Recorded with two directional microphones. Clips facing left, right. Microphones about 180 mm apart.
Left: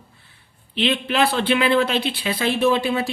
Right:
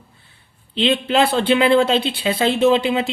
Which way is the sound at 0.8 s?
25° right (ahead or behind).